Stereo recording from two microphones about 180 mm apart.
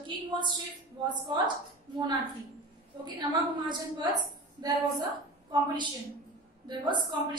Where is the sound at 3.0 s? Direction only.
25° right (ahead or behind).